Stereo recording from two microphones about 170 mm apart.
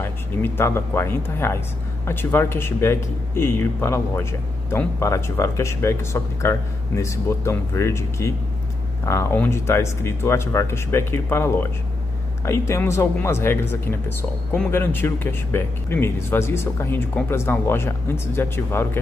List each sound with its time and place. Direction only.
0.0 s speech: 15° left (ahead or behind)